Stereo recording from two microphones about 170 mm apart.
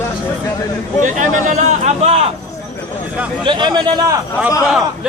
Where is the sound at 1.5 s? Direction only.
45° right (ahead or behind).